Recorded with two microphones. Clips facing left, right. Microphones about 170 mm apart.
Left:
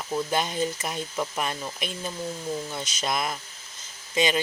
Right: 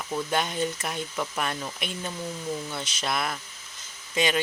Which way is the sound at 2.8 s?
40° left (ahead or behind).